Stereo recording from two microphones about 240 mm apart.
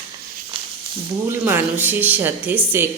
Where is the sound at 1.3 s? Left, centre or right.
Centre.